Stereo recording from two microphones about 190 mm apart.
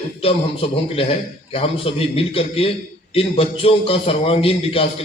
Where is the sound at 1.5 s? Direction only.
30° left (ahead or behind).